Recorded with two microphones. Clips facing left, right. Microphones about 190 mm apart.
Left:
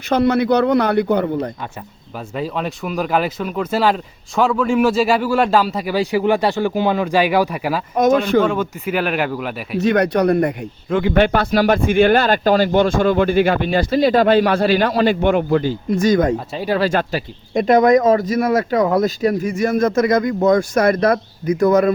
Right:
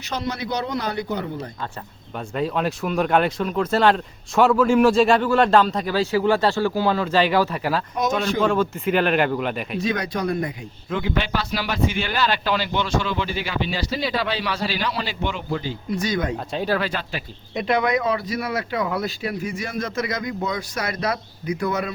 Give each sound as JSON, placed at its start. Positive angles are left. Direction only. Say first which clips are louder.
{"t": 0.1, "sound": "a man's voice", "louder": "left 12 dB", "side_deg": 60}
{"t": 2.1, "sound": "speech", "louder": "even", "side_deg": 0}
{"t": 9.7, "sound": "speech", "louder": "left 12 dB", "side_deg": 65}